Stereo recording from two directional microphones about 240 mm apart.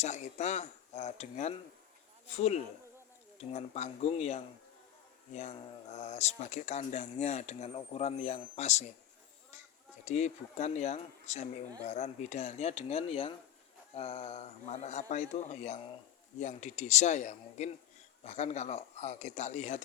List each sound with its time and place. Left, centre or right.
0.0 s speech: left
10.0 s speech: left